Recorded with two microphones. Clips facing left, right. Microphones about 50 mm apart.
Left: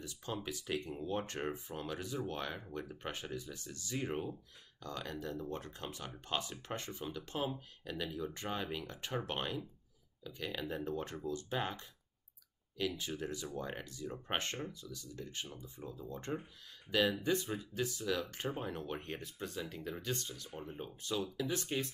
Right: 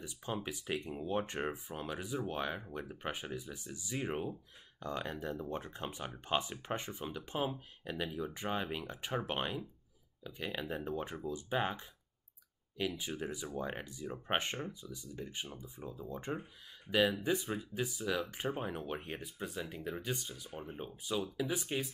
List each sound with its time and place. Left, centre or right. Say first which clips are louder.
0.0 s speech: right 2 dB; centre